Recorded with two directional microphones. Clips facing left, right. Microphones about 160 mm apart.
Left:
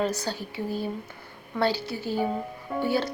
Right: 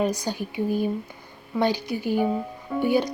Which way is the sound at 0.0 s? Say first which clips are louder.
Right 3 dB; 15° right (ahead or behind).